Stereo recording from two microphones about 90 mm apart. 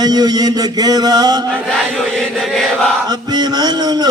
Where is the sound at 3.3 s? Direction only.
50° right (ahead or behind).